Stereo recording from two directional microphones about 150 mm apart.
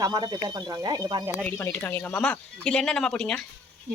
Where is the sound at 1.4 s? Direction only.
10° left (ahead or behind).